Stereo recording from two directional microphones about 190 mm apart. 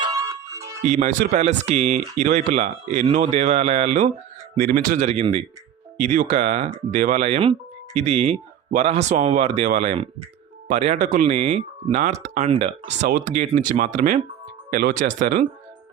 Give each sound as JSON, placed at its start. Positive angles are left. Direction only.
{"t": 0.0, "sound": "music", "side_deg": -15}
{"t": 0.9, "sound": "speech", "side_deg": -40}
{"t": 4.5, "sound": "speech", "side_deg": -50}
{"t": 13.1, "sound": "speech", "side_deg": -45}